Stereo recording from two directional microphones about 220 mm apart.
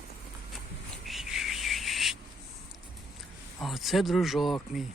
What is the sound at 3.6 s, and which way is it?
Speech, centre (ahead or behind).